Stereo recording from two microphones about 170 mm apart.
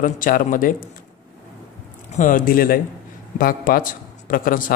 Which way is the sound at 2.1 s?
50° left (ahead or behind).